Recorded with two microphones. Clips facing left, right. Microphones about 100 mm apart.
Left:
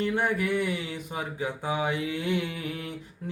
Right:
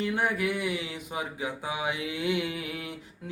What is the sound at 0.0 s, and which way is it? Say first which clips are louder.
Singing: left 1 dB; 5° right (ahead or behind).